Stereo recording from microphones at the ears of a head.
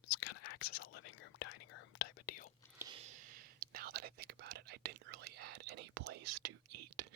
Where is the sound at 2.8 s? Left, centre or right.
Right.